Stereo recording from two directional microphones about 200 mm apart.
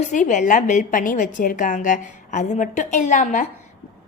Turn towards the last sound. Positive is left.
turn(degrees=40)  # may be behind; listen again after turning